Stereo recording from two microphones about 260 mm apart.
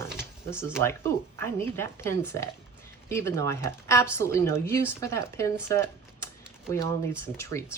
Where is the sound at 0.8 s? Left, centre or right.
Centre.